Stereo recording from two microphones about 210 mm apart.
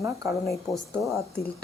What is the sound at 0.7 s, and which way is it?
Speech, centre (ahead or behind).